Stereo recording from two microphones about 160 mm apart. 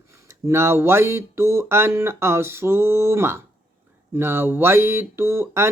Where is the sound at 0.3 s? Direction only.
15° right (ahead or behind).